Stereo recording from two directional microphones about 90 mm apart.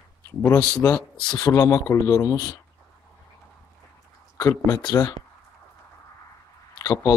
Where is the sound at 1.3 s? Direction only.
35° left (ahead or behind).